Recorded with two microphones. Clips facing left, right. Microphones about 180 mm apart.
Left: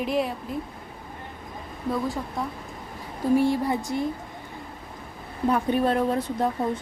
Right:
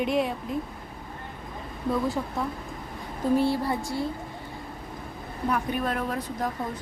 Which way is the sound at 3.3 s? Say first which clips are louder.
Left 3 dB; 15° left (ahead or behind).